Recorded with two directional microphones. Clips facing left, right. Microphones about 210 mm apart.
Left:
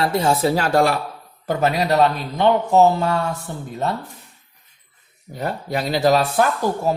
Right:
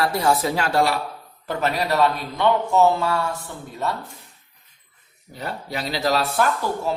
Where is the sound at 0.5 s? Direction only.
40° left (ahead or behind).